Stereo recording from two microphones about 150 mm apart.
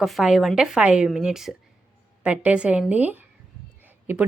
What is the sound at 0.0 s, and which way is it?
A woman's voice, centre (ahead or behind).